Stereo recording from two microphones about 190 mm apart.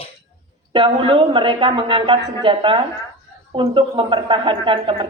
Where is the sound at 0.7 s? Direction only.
25° right (ahead or behind).